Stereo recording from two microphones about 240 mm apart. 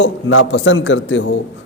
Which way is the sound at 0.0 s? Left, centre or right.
Left.